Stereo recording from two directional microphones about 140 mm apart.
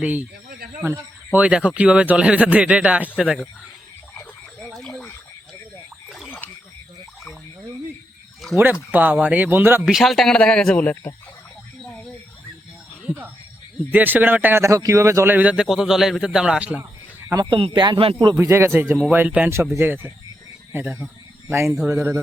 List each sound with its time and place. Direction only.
0.8 s speech: 10° right (ahead or behind)
4.7 s frog: 5° left (ahead or behind)
6.1 s splash: 5° right (ahead or behind)
8.4 s a sound: centre (ahead or behind)
8.9 s speech: 10° right (ahead or behind)
9.8 s speech: centre (ahead or behind)
13.0 s a sound: 10° right (ahead or behind)
13.9 s speech: 15° right (ahead or behind)
17.4 s speech: 35° right (ahead or behind)
18.3 s speech: 20° right (ahead or behind)